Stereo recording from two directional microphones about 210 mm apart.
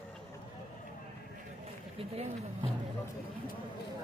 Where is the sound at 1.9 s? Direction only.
30° right (ahead or behind).